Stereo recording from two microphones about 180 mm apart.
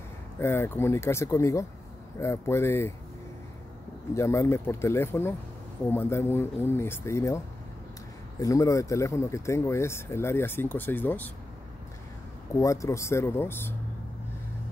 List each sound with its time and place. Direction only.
0.4 s speech: 15° left (ahead or behind)
4.1 s speech: 15° left (ahead or behind)
12.5 s speech: 15° left (ahead or behind)